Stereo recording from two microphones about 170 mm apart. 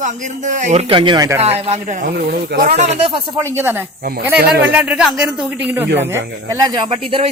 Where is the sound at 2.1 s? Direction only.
75° right (ahead or behind).